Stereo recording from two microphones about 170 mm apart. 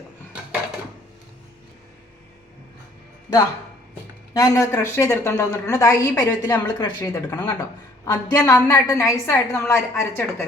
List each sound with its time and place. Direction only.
4.4 s a woman's voice: 20° left (ahead or behind)